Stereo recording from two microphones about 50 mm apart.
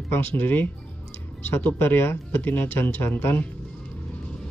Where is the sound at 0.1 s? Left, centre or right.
Left.